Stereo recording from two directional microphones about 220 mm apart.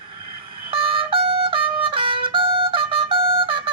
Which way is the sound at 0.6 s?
25° right (ahead or behind).